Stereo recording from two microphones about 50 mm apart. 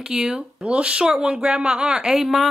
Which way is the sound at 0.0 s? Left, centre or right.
Centre.